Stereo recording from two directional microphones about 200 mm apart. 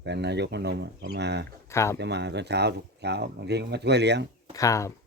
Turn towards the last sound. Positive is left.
turn(degrees=15)  # may be behind; listen again after turning